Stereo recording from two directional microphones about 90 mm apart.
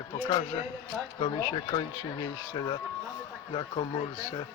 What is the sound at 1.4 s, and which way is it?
Speech, 60° left (ahead or behind).